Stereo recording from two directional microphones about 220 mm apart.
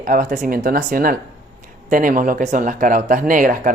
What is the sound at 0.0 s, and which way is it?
Speech, 35° right (ahead or behind).